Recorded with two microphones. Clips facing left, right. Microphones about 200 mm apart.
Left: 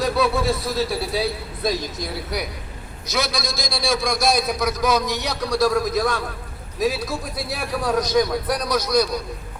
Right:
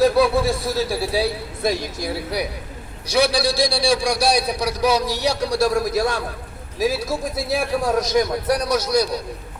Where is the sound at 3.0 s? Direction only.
30° right (ahead or behind).